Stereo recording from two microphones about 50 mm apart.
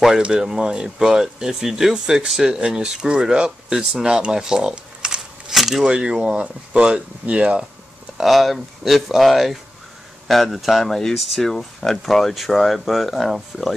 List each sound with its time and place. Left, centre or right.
0.2 s speech: centre
5.5 s keys jangling: centre
5.9 s speech: centre
8.2 s speech: centre